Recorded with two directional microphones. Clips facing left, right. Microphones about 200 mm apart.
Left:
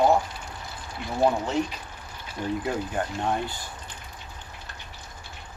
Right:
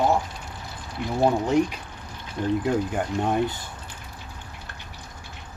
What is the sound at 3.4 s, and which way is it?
Speech, 20° right (ahead or behind).